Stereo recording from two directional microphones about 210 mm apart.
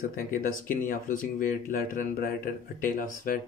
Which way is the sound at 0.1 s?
40° left (ahead or behind).